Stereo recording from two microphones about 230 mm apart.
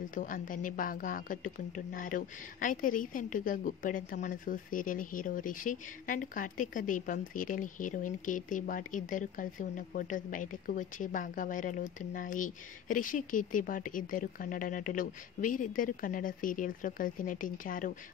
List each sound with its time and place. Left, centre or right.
0.1 s a woman's voice: left